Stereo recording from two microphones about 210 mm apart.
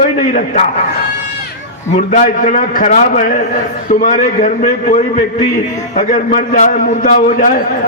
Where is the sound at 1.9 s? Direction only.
40° left (ahead or behind).